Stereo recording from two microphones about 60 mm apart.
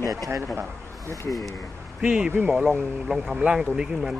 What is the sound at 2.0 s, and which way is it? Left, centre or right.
Speech, centre.